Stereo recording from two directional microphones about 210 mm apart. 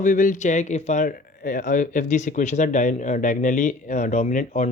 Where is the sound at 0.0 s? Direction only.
40° left (ahead or behind).